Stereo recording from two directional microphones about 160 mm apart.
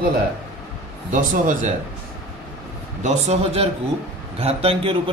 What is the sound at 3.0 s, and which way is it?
A man's voice, 45° right (ahead or behind).